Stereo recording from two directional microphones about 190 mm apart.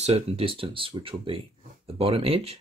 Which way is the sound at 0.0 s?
30° right (ahead or behind).